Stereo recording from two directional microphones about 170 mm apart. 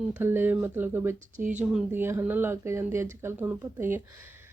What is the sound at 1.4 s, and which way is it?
Speech, 10° right (ahead or behind).